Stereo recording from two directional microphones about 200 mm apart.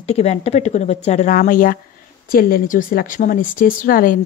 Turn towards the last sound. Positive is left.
turn(degrees=45)  # may be behind; listen again after turning